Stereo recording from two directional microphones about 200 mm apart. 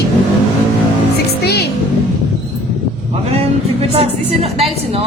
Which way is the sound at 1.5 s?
55° left (ahead or behind).